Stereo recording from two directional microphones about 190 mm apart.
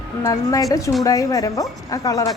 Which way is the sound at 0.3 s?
20° left (ahead or behind).